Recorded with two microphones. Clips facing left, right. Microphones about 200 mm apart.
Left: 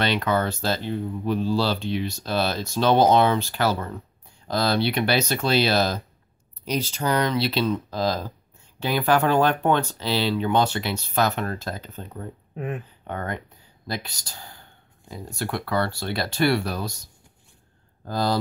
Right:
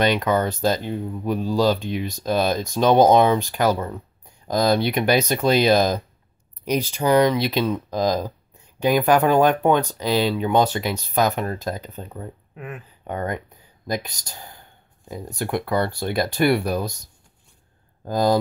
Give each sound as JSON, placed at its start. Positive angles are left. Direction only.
{"t": 0.2, "sound": "speech", "side_deg": -15}